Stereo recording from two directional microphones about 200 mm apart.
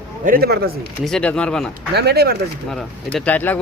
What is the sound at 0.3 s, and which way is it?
Speech, 50° right (ahead or behind).